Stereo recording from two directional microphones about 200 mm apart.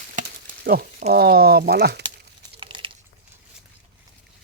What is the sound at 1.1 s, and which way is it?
Speech, 50° right (ahead or behind).